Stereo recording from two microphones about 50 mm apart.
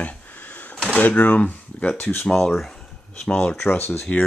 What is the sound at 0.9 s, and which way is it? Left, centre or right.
Speech, left.